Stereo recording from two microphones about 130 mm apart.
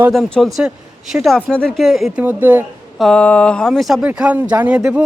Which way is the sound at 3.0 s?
5° left (ahead or behind).